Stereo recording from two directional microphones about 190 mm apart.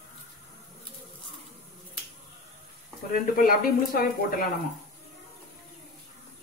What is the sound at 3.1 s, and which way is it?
Speech, 50° left (ahead or behind).